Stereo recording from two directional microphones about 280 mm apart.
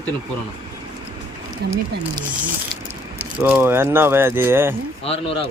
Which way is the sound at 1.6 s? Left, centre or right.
Right.